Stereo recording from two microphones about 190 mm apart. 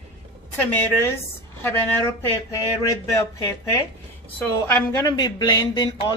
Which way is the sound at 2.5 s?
15° left (ahead or behind).